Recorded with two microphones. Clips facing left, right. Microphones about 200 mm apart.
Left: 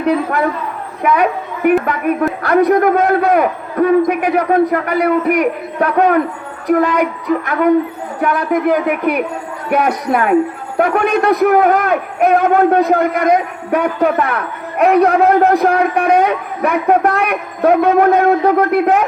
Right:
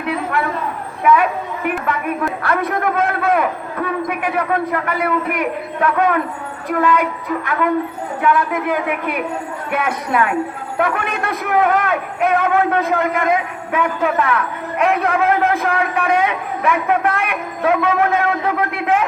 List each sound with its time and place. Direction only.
0.0 s a man's voice: 40° left (ahead or behind)
8.2 s a man's voice: 40° left (ahead or behind)